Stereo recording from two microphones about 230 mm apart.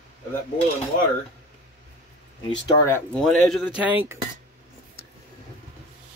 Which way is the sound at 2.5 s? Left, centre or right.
Centre.